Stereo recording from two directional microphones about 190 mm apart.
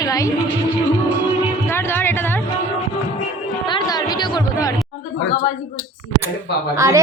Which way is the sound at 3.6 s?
20° left (ahead or behind).